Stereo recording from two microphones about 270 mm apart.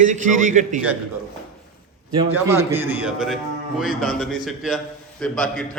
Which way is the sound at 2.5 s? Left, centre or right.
Centre.